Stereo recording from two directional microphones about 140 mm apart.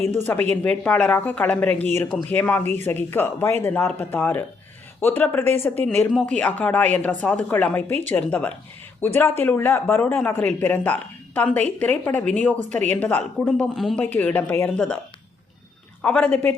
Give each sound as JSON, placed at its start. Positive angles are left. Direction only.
{"t": 0.5, "sound": "speech", "side_deg": 10}
{"t": 13.7, "sound": "speech", "side_deg": 0}
{"t": 14.0, "sound": "speech", "side_deg": 10}
{"t": 16.0, "sound": "speech", "side_deg": 10}